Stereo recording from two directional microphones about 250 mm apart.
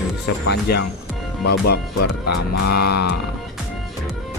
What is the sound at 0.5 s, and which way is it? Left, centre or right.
Speech, left.